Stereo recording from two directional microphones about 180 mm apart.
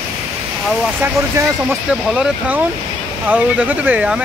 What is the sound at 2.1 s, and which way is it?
Speech, 5° right (ahead or behind).